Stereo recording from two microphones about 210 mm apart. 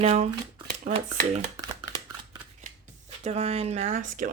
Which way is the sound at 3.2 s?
30° right (ahead or behind).